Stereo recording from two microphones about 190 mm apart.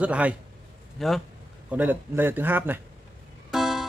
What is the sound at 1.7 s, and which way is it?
Speech, 10° right (ahead or behind).